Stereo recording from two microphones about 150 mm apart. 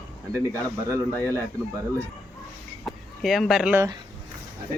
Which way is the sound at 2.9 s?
Centre (ahead or behind).